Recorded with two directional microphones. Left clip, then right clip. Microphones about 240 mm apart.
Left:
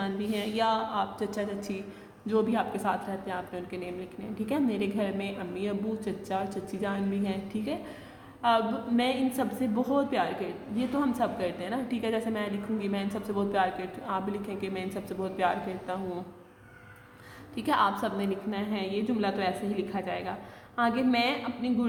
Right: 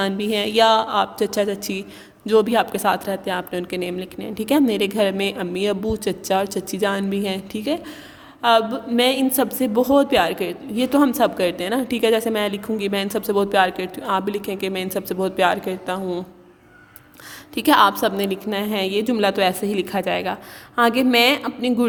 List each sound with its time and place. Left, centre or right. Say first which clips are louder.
0.0 s a woman's voice: right 11 dB; right
17.5 s a woman's voice: right 11 dB; right